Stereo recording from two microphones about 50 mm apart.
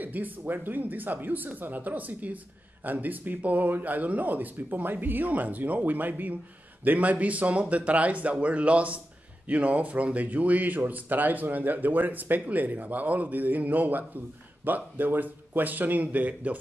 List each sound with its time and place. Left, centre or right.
0.0 s speech: right